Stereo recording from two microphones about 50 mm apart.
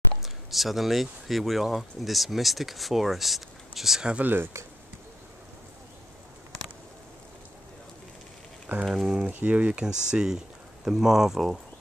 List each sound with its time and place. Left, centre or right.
0.2 s speech: centre
4.2 s speech: right
8.8 s speech: centre
9.3 s speech: right; by 11.4 s centre